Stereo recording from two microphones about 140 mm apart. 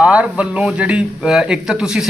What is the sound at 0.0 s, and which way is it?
A man's voice, 10° right (ahead or behind).